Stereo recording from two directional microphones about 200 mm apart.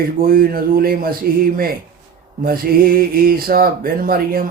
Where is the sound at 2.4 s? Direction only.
50° right (ahead or behind).